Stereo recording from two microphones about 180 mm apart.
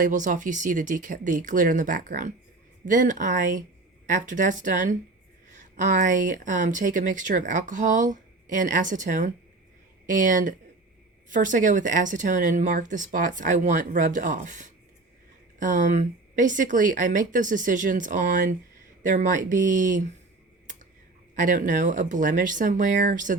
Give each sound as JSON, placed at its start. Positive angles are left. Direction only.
{"t": 0.0, "sound": "speech", "side_deg": -45}
{"t": 21.3, "sound": "speech", "side_deg": -45}